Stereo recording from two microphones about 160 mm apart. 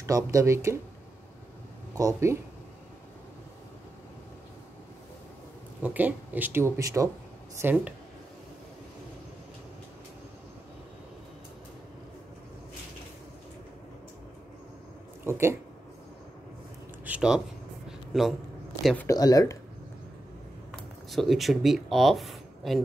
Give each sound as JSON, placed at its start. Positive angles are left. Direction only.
{"t": 0.0, "sound": "speech", "side_deg": -20}
{"t": 2.0, "sound": "speech", "side_deg": -20}
{"t": 5.8, "sound": "speech", "side_deg": -10}
{"t": 15.2, "sound": "speech", "side_deg": -15}
{"t": 17.0, "sound": "a sound", "side_deg": -5}
{"t": 18.8, "sound": "speech", "side_deg": 0}
{"t": 19.0, "sound": "speech", "side_deg": 25}
{"t": 21.1, "sound": "speech", "side_deg": 0}